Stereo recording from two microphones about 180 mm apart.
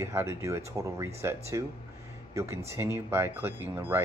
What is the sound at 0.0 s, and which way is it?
Speech, 15° right (ahead or behind).